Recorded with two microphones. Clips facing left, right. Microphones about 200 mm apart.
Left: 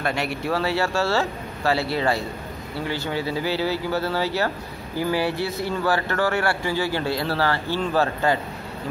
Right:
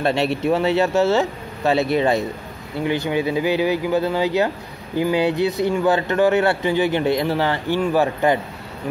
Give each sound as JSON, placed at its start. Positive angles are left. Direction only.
{"t": 0.0, "sound": "speech", "side_deg": -25}